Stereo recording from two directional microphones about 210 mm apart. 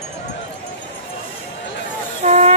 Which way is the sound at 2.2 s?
30° right (ahead or behind).